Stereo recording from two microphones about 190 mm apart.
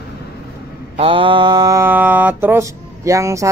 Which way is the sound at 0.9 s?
30° right (ahead or behind).